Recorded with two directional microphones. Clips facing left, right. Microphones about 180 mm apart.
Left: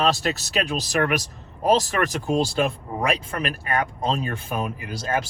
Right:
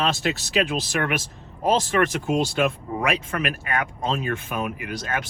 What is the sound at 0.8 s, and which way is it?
Speech, 40° left (ahead or behind).